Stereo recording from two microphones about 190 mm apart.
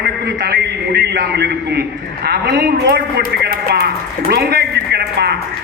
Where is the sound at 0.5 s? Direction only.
60° right (ahead or behind).